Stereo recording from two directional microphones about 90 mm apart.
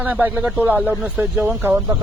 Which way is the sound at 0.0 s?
20° right (ahead or behind).